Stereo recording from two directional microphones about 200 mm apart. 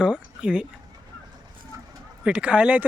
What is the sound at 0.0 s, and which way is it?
Speech, 5° right (ahead or behind).